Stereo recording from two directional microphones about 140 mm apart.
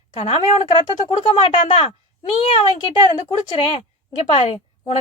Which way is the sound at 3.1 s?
40° left (ahead or behind).